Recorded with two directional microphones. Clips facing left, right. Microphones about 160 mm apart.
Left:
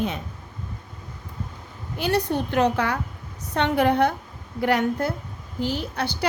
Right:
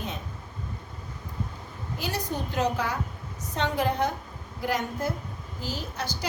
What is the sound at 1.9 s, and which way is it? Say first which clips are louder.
A woman's voice: left 8 dB; 65° left (ahead or behind).